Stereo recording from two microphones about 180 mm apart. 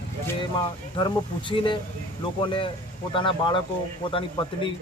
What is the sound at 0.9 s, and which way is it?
A man's voice, 25° left (ahead or behind).